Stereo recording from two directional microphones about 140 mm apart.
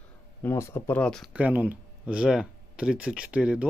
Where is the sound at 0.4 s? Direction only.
20° left (ahead or behind).